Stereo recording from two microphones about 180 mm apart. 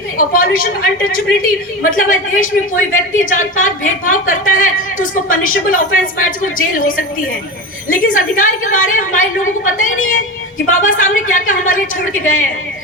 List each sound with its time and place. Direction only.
0.2 s a woman's voice: 55° left (ahead or behind)